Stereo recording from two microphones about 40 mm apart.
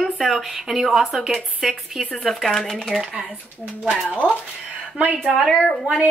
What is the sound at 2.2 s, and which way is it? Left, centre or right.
Speech, centre.